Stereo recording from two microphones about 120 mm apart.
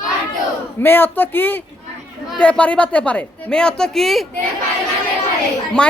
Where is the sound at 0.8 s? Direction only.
15° left (ahead or behind); by 4.3 s centre (ahead or behind).